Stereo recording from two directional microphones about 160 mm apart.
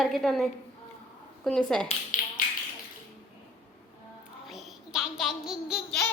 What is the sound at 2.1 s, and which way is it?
Tap, 50° left (ahead or behind).